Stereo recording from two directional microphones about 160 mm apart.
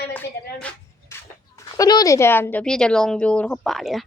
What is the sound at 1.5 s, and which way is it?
Speech, 20° left (ahead or behind).